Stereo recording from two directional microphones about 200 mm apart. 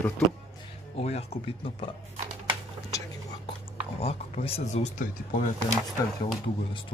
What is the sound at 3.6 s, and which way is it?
Speech, 30° left (ahead or behind).